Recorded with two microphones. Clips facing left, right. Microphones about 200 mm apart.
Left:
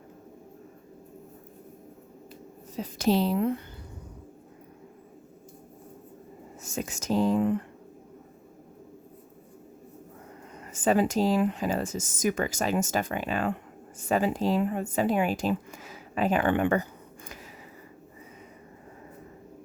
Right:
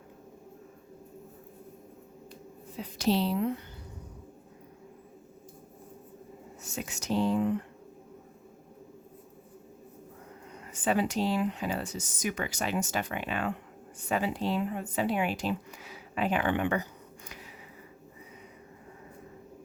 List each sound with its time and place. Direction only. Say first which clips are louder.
2.7 s speech: left 3 dB; 45° left (ahead or behind)
6.7 s speech: left 3 dB; 45° left (ahead or behind)
10.7 s speech: left 4 dB; 45° left (ahead or behind)